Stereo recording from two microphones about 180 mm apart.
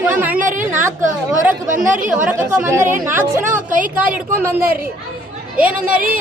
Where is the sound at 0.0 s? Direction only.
10° right (ahead or behind).